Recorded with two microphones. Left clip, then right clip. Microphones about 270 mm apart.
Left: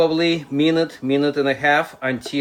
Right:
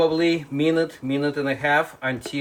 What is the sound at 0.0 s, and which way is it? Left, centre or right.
Speech, left.